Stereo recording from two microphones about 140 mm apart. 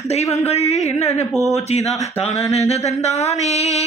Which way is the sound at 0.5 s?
50° left (ahead or behind).